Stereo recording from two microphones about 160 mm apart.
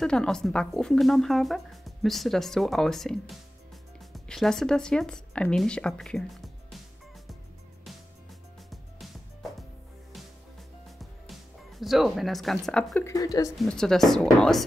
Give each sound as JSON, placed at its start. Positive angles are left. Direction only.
{"t": 0.0, "sound": "speech", "side_deg": 5}
{"t": 8.6, "sound": "music", "side_deg": 0}
{"t": 11.0, "sound": "music", "side_deg": 0}
{"t": 13.1, "sound": "speech", "side_deg": 20}
{"t": 13.6, "sound": "speech", "side_deg": 5}